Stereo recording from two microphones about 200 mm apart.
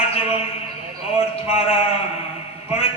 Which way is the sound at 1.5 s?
30° left (ahead or behind).